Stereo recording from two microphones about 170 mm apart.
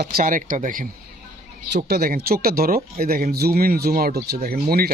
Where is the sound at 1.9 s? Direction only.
60° right (ahead or behind).